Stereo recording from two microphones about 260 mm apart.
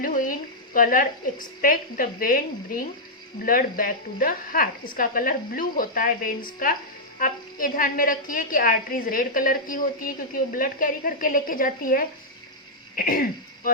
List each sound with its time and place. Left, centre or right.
0.0 s a woman's voice: left